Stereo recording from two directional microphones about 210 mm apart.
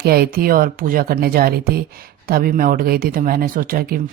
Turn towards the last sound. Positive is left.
turn(degrees=-45)  # may be behind; listen again after turning